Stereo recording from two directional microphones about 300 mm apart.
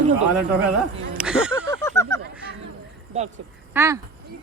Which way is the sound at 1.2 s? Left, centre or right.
Centre.